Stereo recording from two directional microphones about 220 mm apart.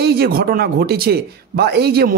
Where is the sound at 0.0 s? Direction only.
45° right (ahead or behind).